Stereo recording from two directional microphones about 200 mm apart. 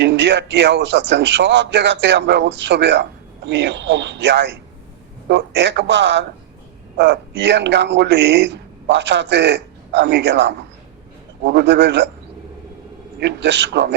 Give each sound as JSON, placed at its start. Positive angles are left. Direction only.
{"t": 0.0, "sound": "a man's voice", "side_deg": -60}
{"t": 13.1, "sound": "a man's voice", "side_deg": -60}